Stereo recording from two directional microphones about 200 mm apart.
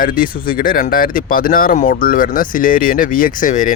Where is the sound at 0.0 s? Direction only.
45° left (ahead or behind).